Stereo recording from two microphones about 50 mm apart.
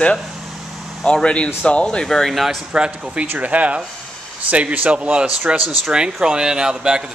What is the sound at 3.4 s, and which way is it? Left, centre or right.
Speech, right.